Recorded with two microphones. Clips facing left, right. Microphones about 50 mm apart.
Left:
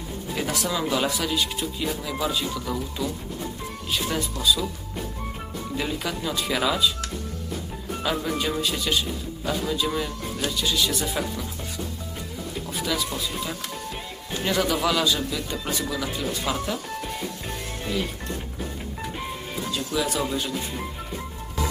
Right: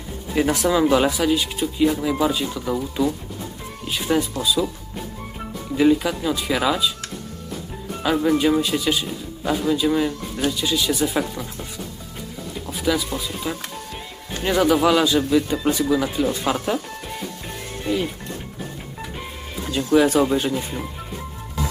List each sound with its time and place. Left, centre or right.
0.4 s speech: right
5.7 s speech: centre
8.0 s speech: centre
12.6 s music: centre
13.1 s speech: centre
16.5 s speech: right
17.9 s speech: centre
19.7 s speech: right
20.3 s speech: right